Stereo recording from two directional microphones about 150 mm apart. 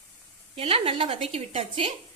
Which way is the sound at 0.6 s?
40° right (ahead or behind).